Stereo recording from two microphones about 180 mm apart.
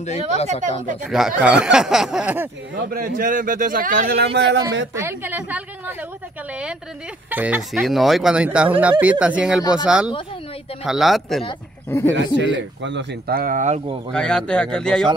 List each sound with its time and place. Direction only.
0.0 s speech: 40° left (ahead or behind)
1.0 s speech: centre (ahead or behind)
2.7 s speech: 50° right (ahead or behind)
4.4 s speech: 75° right (ahead or behind)
4.9 s speech: 10° right (ahead or behind)
11.9 s speech: 15° left (ahead or behind)
12.4 s speech: 85° right; by 13.7 s 45° right (ahead or behind)
14.1 s speech: 5° left (ahead or behind)